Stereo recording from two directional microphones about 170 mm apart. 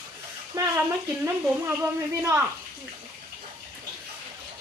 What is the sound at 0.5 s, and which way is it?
Frying, 20° right (ahead or behind).